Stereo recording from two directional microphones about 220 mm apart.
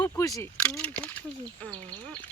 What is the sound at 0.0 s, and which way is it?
Speech, 15° left (ahead or behind).